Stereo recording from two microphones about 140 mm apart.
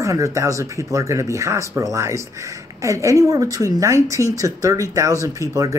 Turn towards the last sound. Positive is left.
turn(degrees=-25)  # may be behind; listen again after turning